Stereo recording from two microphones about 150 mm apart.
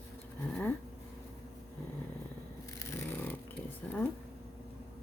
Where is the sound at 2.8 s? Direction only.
15° left (ahead or behind).